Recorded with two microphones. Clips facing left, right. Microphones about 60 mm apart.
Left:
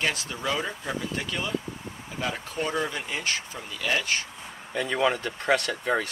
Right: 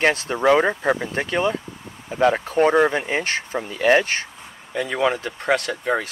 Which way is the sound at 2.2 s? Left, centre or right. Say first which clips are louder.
Right 13 dB; right.